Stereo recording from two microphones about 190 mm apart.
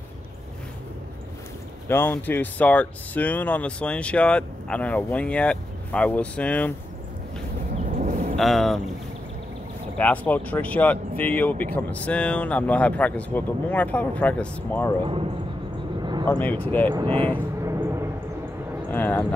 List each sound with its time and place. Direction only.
1.9 s speech: 10° left (ahead or behind)
7.7 s a sound: 40° right (ahead or behind)
8.4 s speech: centre (ahead or behind)
9.9 s speech: 10° left (ahead or behind)
16.0 s a sound: 25° right (ahead or behind)
16.3 s speech: 10° left (ahead or behind)
16.9 s speech: 25° right (ahead or behind)
17.6 s a sound: 15° right (ahead or behind)
18.9 s speech: 10° left (ahead or behind)